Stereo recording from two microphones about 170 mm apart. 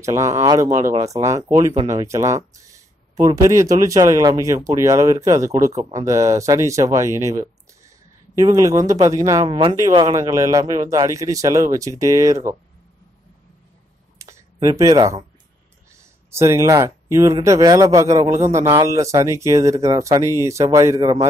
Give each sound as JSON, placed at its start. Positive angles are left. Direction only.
{"t": 0.0, "sound": "a man's voice", "side_deg": -20}
{"t": 14.1, "sound": "a sound", "side_deg": -20}
{"t": 16.3, "sound": "speech", "side_deg": -15}